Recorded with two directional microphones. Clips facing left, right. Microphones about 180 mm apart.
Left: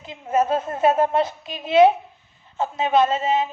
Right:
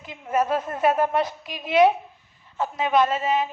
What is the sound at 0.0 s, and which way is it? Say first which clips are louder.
Speech: left 3 dB; 25° left (ahead or behind).